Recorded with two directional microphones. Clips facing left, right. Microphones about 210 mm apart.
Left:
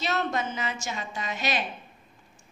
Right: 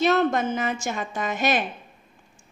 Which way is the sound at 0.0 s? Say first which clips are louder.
Right 8 dB; 50° right (ahead or behind).